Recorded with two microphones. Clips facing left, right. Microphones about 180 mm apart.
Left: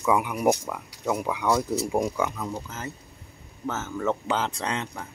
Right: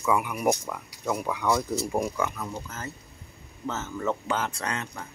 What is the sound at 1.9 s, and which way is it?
Speech, 15° left (ahead or behind).